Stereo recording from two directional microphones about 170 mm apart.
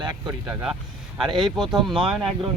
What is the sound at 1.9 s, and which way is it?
Speech, 5° right (ahead or behind).